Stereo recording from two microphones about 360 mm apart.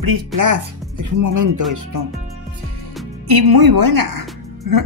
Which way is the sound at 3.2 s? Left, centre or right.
Right.